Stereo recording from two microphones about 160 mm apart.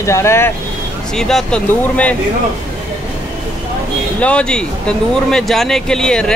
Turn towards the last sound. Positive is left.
turn(degrees=5)  # may be behind; listen again after turning